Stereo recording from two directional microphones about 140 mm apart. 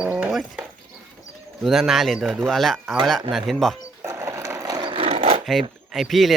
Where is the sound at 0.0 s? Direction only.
5° right (ahead or behind).